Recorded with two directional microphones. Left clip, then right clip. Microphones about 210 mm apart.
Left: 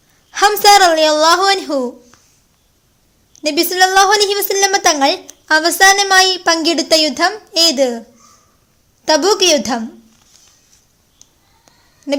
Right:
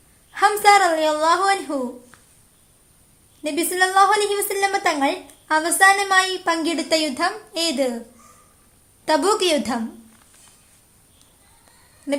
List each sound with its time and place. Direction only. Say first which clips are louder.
0.3 s a woman's voice: left 6 dB; 50° left (ahead or behind)
3.4 s a woman's voice: left 8 dB; 45° left (ahead or behind)
9.0 s a woman's voice: left 7 dB; 35° left (ahead or behind)